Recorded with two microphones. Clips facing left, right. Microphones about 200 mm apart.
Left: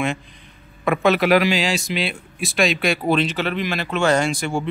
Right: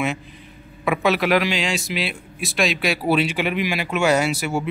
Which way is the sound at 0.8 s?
5° right (ahead or behind).